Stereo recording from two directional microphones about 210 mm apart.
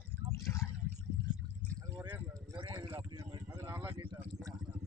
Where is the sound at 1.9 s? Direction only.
15° right (ahead or behind).